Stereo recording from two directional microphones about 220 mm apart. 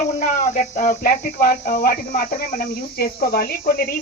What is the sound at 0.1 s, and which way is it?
Speech, 35° left (ahead or behind).